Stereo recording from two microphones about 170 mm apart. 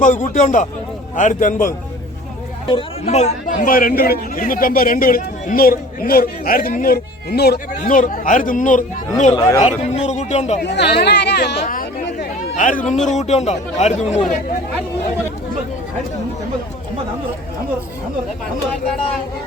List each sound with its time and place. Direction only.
0.0 s a man's voice: 45° left (ahead or behind)
2.6 s speech: 35° left (ahead or behind)
3.7 s a man's voice: 60° left (ahead or behind)
7.8 s a man's voice: 50° left (ahead or behind)
9.3 s speech: 20° left (ahead or behind)
9.6 s speech: 40° left (ahead or behind)
10.6 s speech: 85° left
11.6 s chatter: 50° left (ahead or behind)
12.5 s a man's voice: 50° left (ahead or behind)